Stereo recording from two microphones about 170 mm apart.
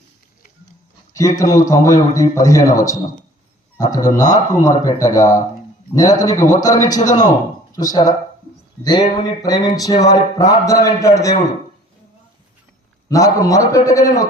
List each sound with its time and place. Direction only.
1.4 s speech: 20° left (ahead or behind)
13.1 s speech: 20° left (ahead or behind)